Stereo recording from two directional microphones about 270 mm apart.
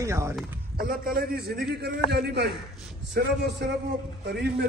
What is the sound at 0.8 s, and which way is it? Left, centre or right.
A man's voice, right.